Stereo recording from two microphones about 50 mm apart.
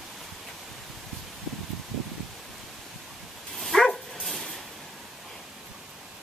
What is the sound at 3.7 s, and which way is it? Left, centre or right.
Dog, centre.